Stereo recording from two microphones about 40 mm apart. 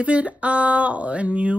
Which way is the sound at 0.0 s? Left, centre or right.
Right.